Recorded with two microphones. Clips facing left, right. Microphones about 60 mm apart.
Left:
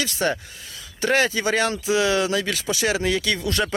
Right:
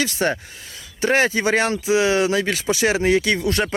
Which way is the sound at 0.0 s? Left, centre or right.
Right.